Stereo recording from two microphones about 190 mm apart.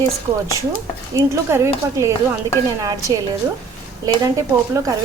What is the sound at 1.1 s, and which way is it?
A woman's voice, 15° right (ahead or behind).